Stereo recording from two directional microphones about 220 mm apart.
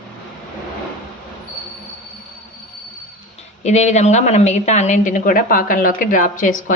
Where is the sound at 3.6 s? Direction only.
30° left (ahead or behind).